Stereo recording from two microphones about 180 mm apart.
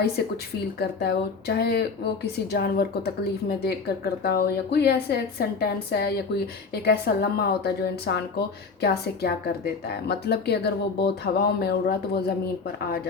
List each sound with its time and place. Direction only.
0.8 s speech: 65° left (ahead or behind)